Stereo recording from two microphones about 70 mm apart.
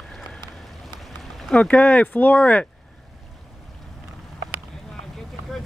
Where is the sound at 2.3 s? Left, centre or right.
Centre.